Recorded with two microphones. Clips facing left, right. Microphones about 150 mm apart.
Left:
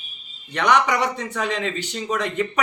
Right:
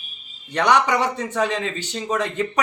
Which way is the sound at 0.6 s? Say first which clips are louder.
Right 1 dB; 30° right (ahead or behind).